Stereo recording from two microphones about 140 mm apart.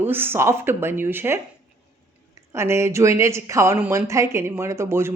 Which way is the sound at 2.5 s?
20° right (ahead or behind).